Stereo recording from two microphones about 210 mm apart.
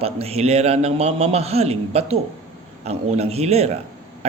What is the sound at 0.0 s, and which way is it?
A man's voice, 30° right (ahead or behind).